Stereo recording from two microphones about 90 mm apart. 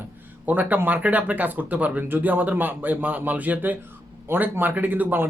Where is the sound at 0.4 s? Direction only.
20° right (ahead or behind).